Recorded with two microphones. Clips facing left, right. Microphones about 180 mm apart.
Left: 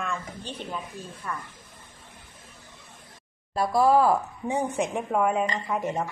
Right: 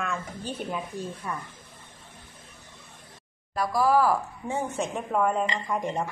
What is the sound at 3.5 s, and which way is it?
A woman's voice, 25° left (ahead or behind).